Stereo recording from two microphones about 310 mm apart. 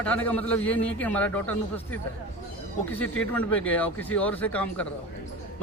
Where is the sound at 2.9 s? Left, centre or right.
Centre.